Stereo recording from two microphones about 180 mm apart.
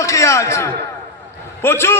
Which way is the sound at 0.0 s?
15° left (ahead or behind).